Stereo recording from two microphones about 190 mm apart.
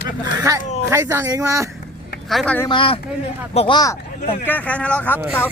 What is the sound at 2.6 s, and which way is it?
Speech, 25° left (ahead or behind).